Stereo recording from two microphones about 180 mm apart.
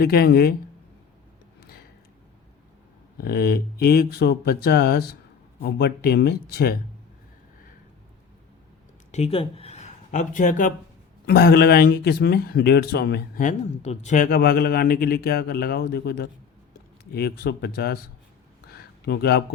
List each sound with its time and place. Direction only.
0.0 s speech: 60° left (ahead or behind)
3.2 s speech: 60° left (ahead or behind)
9.1 s speech: 35° left (ahead or behind)
11.3 s speech: 60° left (ahead or behind)
13.4 s speech: 40° left (ahead or behind); by 18.0 s 60° left (ahead or behind)
19.0 s speech: 65° left (ahead or behind)